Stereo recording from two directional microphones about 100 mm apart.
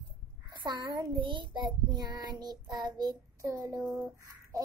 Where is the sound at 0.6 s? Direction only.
50° right (ahead or behind).